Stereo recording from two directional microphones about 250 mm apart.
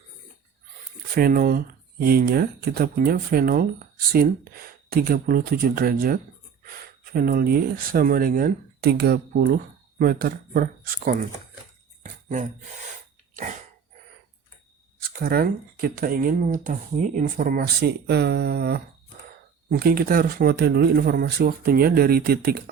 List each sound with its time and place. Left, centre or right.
1.1 s speech: right
15.1 s speech: right